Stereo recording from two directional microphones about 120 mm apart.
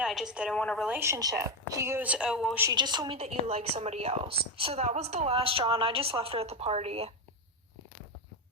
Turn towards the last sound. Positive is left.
turn(degrees=-60)  # may be behind; listen again after turning